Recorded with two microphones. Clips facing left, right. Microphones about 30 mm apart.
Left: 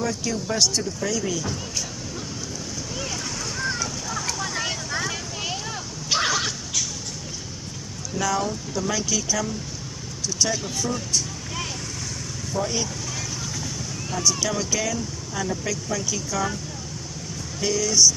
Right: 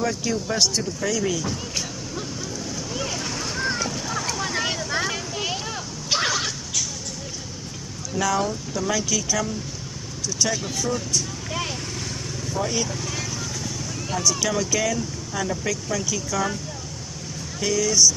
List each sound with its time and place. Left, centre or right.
0.0 s speech: centre
2.9 s a sound: centre
3.3 s boat: right
5.1 s vehicle: centre
6.0 s a sound: centre
8.2 s speech: centre
12.5 s speech: centre
14.2 s speech: centre
17.6 s speech: centre